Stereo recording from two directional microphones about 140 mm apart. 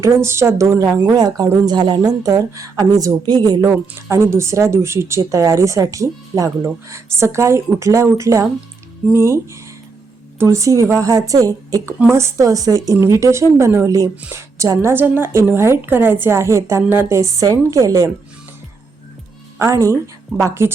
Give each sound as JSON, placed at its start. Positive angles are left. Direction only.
{"t": 0.0, "sound": "a woman's voice", "side_deg": -20}
{"t": 19.5, "sound": "a woman's voice", "side_deg": -25}